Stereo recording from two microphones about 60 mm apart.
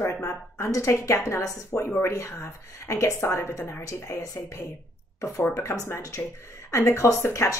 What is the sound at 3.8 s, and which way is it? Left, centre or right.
Speech, left.